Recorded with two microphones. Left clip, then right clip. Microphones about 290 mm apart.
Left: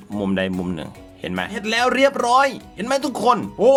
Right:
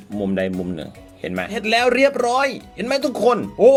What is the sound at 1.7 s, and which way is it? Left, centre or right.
Speech, left.